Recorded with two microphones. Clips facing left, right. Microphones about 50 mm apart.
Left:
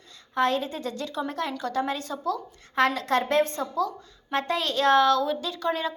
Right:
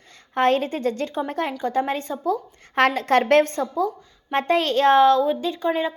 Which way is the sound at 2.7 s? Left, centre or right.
Right.